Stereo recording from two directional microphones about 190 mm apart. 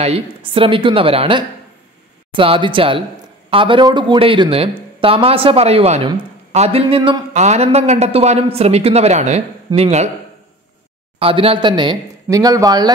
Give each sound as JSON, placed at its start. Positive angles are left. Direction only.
{"t": 0.0, "sound": "a man's voice", "side_deg": -30}
{"t": 7.3, "sound": "a man's voice", "side_deg": -35}
{"t": 11.1, "sound": "a man's voice", "side_deg": -30}